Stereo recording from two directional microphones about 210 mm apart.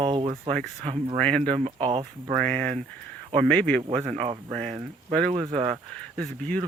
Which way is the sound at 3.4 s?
5° left (ahead or behind).